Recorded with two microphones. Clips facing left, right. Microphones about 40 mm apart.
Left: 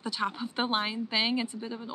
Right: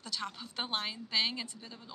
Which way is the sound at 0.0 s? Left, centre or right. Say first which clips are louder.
Left 8 dB; centre.